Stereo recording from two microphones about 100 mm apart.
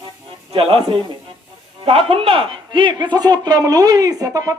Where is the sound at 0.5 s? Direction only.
70° right (ahead or behind).